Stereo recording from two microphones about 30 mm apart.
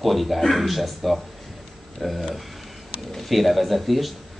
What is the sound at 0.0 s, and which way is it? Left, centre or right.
A man's voice, centre.